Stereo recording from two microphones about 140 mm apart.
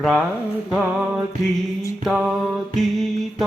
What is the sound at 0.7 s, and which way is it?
Music, 10° right (ahead or behind).